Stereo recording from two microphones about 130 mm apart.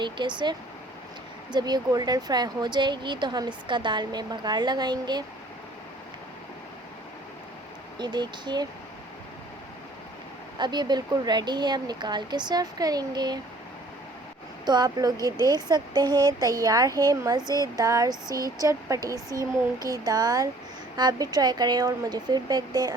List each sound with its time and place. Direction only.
0.0 s speech: 35° right (ahead or behind)
1.5 s speech: 35° right (ahead or behind)
7.9 s speech: 35° right (ahead or behind)
10.6 s speech: 35° right (ahead or behind)
14.6 s speech: 35° right (ahead or behind)